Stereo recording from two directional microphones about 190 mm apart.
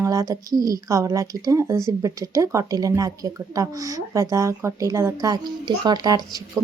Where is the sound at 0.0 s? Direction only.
15° right (ahead or behind).